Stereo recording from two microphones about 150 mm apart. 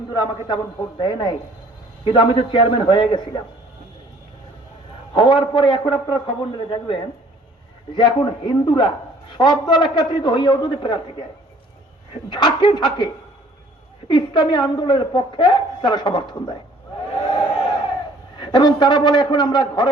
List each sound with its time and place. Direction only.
0.1 s a man's voice: 25° left (ahead or behind)
5.1 s a woman's voice: 30° left (ahead or behind)
12.3 s a woman's voice: 30° left (ahead or behind)
14.1 s a woman's voice: 30° left (ahead or behind)
18.3 s a man's voice: 30° left (ahead or behind)